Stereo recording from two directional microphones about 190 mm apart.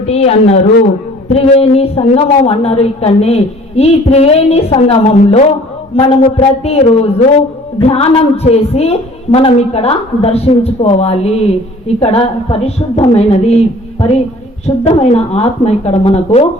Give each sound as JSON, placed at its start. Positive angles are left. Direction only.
{"t": 0.1, "sound": "a woman's voice", "side_deg": 35}